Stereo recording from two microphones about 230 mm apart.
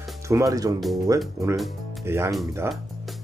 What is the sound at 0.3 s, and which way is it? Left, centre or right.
Speech, centre.